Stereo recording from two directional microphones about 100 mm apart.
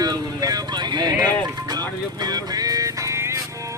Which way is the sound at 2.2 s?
40° right (ahead or behind).